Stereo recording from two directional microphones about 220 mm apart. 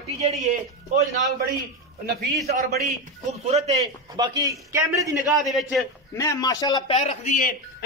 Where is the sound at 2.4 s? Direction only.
45° right (ahead or behind).